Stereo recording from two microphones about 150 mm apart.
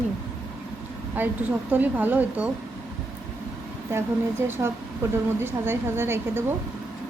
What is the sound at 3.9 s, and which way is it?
A woman's voice, 15° right (ahead or behind).